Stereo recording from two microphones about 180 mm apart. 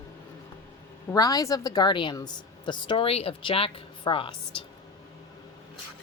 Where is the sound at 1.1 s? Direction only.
20° left (ahead or behind).